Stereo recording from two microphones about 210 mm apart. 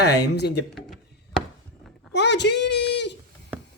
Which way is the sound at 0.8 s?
Centre (ahead or behind).